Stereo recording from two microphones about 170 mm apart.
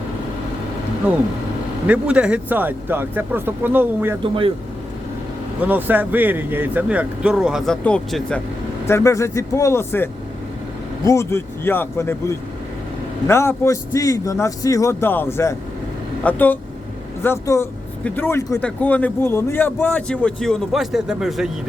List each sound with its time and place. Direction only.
1.9 s speech: 5° right (ahead or behind)
4.2 s speech: 30° right (ahead or behind)
5.6 s speech: 10° right (ahead or behind); by 8.4 s 5° left (ahead or behind)
8.9 s a man's voice: 15° left (ahead or behind); by 21.5 s centre (ahead or behind)